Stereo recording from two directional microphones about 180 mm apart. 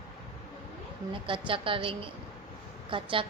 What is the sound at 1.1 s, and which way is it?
A woman's voice, 30° right (ahead or behind).